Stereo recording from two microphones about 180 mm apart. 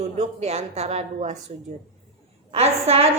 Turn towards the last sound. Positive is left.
turn(degrees=-35)  # may be behind; listen again after turning